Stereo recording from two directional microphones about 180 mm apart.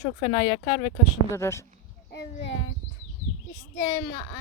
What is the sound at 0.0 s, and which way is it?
Speech, 30° left (ahead or behind).